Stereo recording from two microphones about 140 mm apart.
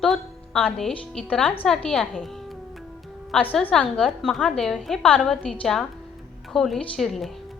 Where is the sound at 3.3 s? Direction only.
10° left (ahead or behind).